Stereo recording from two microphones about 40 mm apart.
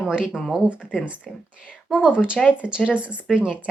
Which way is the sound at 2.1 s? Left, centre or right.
Left.